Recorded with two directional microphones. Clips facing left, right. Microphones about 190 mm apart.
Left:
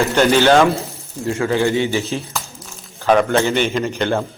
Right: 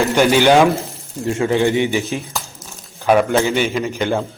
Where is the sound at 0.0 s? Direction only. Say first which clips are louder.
Right 1 dB; 15° right (ahead or behind).